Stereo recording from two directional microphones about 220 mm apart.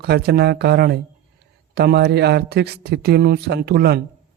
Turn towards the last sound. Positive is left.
turn(degrees=-45)  # may be behind; listen again after turning